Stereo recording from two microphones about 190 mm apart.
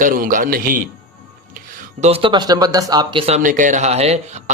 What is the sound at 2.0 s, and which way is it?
Speech, 30° right (ahead or behind).